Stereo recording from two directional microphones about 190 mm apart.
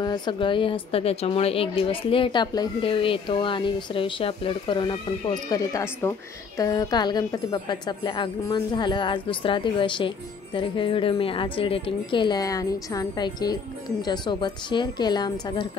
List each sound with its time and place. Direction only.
0.0 s a woman's voice: 25° left (ahead or behind)